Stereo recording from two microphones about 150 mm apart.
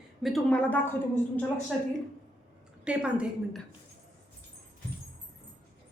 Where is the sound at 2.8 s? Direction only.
5° right (ahead or behind).